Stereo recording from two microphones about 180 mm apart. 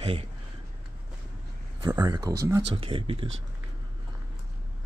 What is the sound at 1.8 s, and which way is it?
Speech, 25° right (ahead or behind).